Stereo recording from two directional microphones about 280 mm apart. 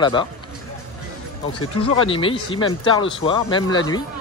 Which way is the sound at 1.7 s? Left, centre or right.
Centre.